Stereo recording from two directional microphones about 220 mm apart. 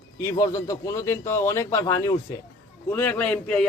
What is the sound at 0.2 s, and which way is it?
A man's voice, 15° left (ahead or behind).